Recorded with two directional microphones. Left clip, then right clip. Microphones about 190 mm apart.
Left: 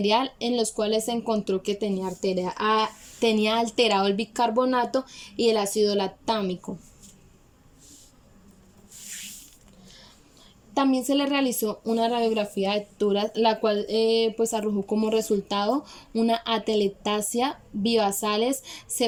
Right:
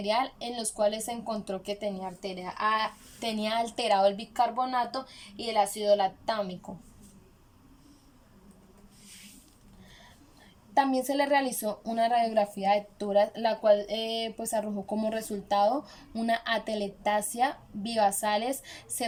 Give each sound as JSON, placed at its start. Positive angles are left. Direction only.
{"t": 0.0, "sound": "speech", "side_deg": 15}
{"t": 2.4, "sound": "speech", "side_deg": 60}
{"t": 3.2, "sound": "a woman's voice", "side_deg": 15}
{"t": 10.8, "sound": "speech", "side_deg": 10}